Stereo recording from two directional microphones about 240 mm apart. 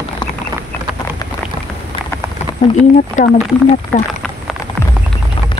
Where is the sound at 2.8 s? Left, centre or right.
Left.